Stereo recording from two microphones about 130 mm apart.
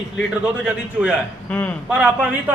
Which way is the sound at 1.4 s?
10° left (ahead or behind).